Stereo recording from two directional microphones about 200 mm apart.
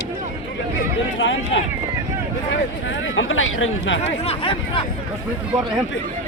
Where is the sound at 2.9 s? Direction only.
75° left (ahead or behind).